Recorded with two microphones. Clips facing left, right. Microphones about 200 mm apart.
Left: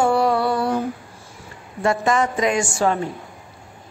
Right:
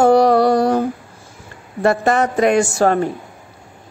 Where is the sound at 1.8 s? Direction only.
60° right (ahead or behind).